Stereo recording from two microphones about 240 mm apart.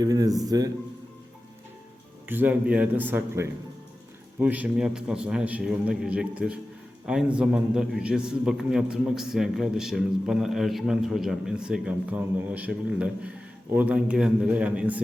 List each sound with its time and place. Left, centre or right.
0.0 s speech: centre
2.2 s a man's voice: centre